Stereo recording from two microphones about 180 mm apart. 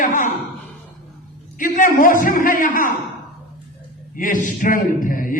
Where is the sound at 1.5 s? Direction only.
50° left (ahead or behind).